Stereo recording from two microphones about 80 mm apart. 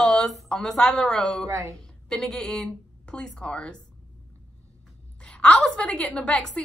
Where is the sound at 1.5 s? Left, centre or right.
Right.